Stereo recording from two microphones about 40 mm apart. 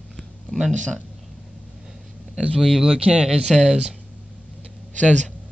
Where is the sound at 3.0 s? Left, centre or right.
Right.